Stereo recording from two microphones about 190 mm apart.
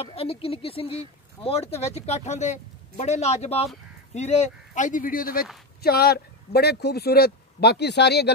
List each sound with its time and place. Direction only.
0.0 s speech: 30° left (ahead or behind); by 8.3 s 60° left (ahead or behind)